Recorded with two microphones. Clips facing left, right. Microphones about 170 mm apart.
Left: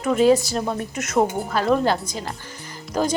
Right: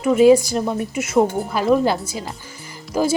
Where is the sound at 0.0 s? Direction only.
10° right (ahead or behind).